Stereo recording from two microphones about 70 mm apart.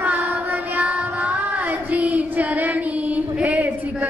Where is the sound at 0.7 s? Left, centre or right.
Right.